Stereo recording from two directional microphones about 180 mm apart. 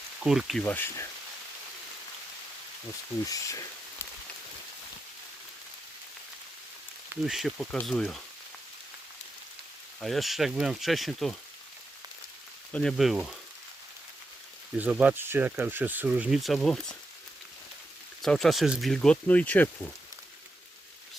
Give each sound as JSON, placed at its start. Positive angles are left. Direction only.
{"t": 0.2, "sound": "speech", "side_deg": 0}
{"t": 0.6, "sound": "speech", "side_deg": 10}
{"t": 3.2, "sound": "a sound", "side_deg": 20}
{"t": 7.3, "sound": "speech", "side_deg": 0}
{"t": 10.0, "sound": "speech", "side_deg": 0}
{"t": 12.7, "sound": "speech", "side_deg": 0}
{"t": 14.8, "sound": "speech", "side_deg": -5}
{"t": 18.2, "sound": "speech", "side_deg": 0}